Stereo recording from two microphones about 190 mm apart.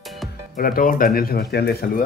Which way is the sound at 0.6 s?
50° left (ahead or behind).